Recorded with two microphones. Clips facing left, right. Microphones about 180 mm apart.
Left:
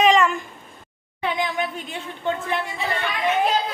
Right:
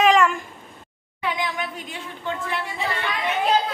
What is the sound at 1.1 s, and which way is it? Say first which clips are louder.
Speech: left 2 dB; 25° left (ahead or behind).